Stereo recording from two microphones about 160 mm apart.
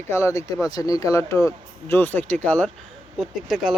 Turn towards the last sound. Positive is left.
turn(degrees=0)  # may be behind; listen again after turning